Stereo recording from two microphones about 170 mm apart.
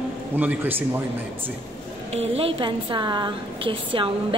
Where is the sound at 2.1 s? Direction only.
35° right (ahead or behind).